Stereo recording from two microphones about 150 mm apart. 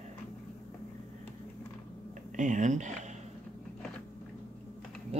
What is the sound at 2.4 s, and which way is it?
Speech, 55° right (ahead or behind).